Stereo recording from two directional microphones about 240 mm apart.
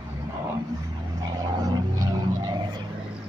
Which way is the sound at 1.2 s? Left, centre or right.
Centre.